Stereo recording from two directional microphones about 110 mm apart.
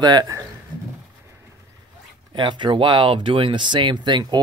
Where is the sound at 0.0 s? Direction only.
40° right (ahead or behind).